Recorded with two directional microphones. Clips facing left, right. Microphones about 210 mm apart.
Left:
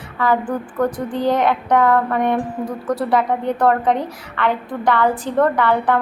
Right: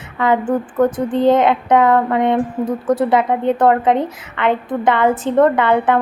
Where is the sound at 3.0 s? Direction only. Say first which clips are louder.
Right 3 dB; 20° right (ahead or behind).